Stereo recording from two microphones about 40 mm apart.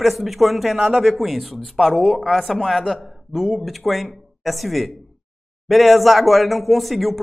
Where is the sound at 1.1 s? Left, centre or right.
Centre.